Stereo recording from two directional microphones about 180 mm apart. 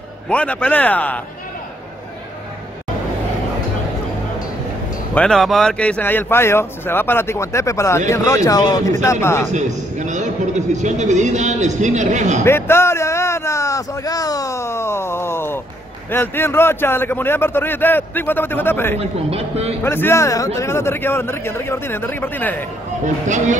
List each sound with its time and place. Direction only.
0.3 s a man's voice: 5° left (ahead or behind)
5.1 s a man's voice: 5° left (ahead or behind)
9.5 s a man's voice: 40° right (ahead or behind)
12.4 s a sound: 15° left (ahead or behind)
16.1 s a man's voice: 10° left (ahead or behind)
18.9 s a man's voice: 35° right (ahead or behind)
19.8 s a man's voice: 10° left (ahead or behind)
23.2 s speech: 40° right (ahead or behind)